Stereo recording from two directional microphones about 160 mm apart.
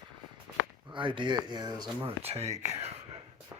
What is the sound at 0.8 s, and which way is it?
Speech, 30° right (ahead or behind).